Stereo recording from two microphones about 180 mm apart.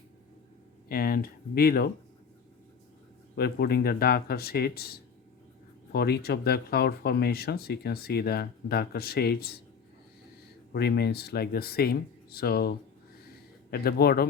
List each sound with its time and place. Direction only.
0.9 s speech: 55° left (ahead or behind)
3.3 s speech: 60° left (ahead or behind)
10.7 s speech: 65° left (ahead or behind)